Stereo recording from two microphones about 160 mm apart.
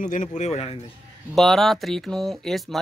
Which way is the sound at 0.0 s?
50° left (ahead or behind).